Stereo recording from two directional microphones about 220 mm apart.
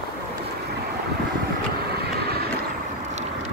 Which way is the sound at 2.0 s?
45° right (ahead or behind).